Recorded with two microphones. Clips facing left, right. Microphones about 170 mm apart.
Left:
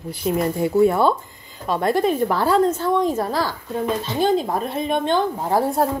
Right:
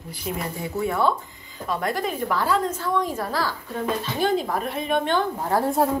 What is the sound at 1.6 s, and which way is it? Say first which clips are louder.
Speech: left 7 dB; 30° left (ahead or behind).